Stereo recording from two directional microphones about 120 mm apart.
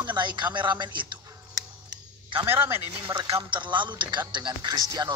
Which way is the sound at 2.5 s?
20° right (ahead or behind).